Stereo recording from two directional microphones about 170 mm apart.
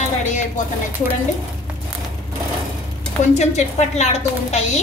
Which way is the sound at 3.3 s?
40° left (ahead or behind).